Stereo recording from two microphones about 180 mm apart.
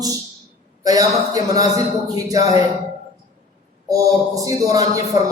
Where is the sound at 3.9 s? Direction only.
20° right (ahead or behind).